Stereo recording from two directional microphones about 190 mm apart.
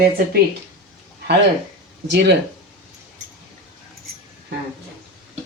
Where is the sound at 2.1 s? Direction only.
65° right (ahead or behind).